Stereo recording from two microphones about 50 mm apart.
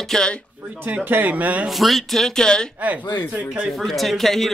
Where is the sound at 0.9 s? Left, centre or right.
Right.